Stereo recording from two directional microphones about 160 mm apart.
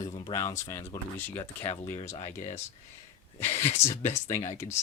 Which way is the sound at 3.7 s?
45° left (ahead or behind).